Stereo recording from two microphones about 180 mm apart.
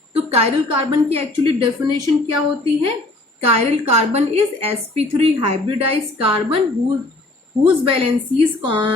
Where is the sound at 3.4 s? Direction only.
35° right (ahead or behind).